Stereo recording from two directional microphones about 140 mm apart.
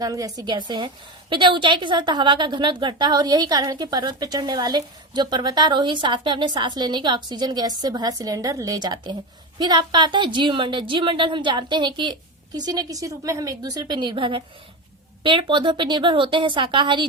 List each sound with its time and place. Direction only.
0.0 s a woman's voice: 25° right (ahead or behind)